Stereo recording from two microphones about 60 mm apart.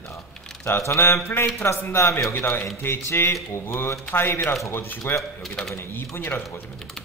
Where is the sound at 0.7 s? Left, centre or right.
Left.